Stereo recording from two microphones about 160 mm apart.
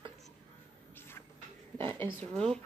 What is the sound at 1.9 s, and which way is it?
Speech, 15° left (ahead or behind).